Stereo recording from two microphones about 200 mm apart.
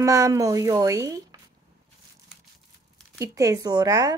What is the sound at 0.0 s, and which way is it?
Speech, 15° right (ahead or behind).